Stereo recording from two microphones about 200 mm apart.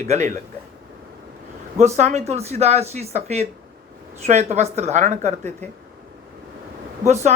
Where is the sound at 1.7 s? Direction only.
35° right (ahead or behind).